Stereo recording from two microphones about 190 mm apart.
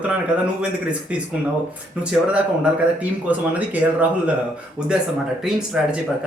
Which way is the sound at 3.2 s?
10° right (ahead or behind).